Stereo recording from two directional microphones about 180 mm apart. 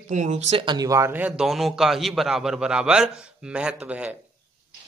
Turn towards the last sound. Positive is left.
turn(degrees=-5)  # may be behind; listen again after turning